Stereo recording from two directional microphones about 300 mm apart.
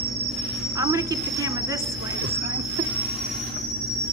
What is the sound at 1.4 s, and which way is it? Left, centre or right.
Speech, centre.